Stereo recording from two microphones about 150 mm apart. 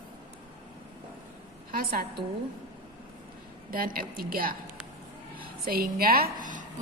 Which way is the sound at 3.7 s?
75° right (ahead or behind).